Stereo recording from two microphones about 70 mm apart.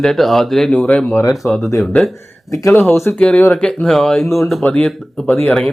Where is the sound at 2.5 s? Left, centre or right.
Left.